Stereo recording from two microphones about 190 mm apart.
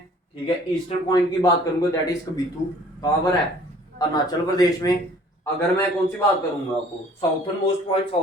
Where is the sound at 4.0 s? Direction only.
20° left (ahead or behind).